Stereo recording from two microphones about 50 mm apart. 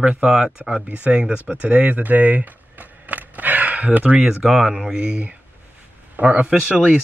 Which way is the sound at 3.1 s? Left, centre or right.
Right.